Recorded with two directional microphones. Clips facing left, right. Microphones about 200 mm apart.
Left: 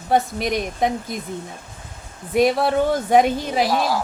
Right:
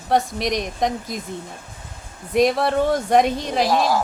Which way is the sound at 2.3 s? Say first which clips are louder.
Even; centre (ahead or behind).